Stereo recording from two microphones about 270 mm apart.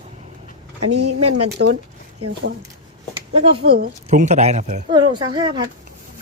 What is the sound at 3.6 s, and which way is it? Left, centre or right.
Speech, right.